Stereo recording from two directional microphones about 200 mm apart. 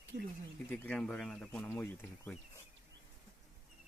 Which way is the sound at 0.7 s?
5° left (ahead or behind).